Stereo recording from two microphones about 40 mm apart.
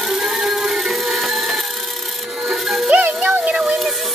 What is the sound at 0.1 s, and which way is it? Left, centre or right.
Music, centre.